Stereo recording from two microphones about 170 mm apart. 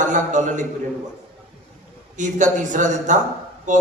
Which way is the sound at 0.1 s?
45° right (ahead or behind).